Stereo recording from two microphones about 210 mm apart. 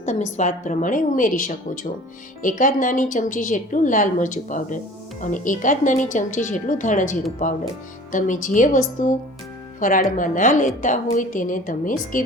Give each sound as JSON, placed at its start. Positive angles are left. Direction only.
{"t": 0.0, "sound": "a woman's voice", "side_deg": 35}